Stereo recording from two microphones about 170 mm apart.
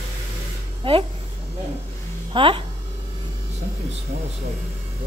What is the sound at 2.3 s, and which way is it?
Speech, 30° right (ahead or behind).